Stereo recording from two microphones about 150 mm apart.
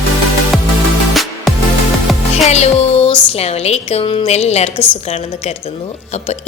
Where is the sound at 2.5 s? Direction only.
45° left (ahead or behind).